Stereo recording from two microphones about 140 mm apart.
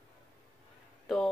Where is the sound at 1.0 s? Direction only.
Centre (ahead or behind).